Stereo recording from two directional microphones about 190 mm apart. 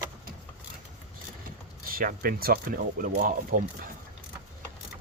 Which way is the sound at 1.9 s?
50° right (ahead or behind).